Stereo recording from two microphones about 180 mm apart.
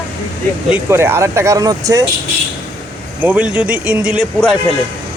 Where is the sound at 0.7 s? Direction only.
15° right (ahead or behind).